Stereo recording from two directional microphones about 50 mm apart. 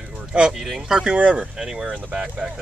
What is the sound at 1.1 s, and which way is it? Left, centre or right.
Speech, right.